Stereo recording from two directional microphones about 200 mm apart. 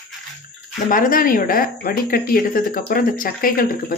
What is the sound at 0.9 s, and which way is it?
Speech, 45° left (ahead or behind).